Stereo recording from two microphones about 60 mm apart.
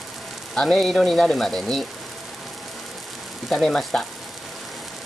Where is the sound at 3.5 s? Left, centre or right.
Centre.